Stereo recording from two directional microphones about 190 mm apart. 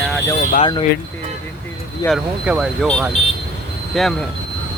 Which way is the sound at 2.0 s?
Centre (ahead or behind).